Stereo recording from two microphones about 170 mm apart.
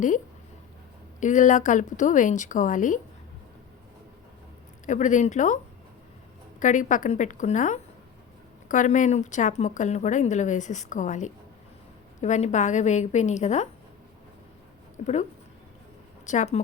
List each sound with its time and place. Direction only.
1.2 s a woman's voice: 50° left (ahead or behind)
4.9 s a woman's voice: 45° left (ahead or behind)
6.6 s a woman's voice: 50° left (ahead or behind)
14.9 s a woman's voice: 45° left (ahead or behind)